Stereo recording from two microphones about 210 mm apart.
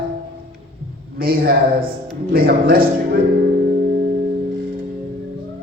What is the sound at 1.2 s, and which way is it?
A man's voice, 45° right (ahead or behind).